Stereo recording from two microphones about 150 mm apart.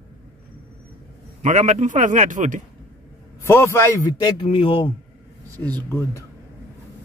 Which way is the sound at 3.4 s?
20° left (ahead or behind).